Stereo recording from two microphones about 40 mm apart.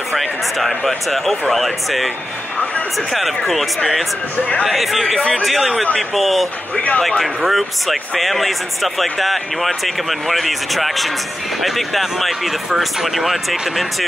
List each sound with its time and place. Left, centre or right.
0.1 s speech: centre
3.1 s speech: centre
6.7 s speech: left
7.0 s speech: centre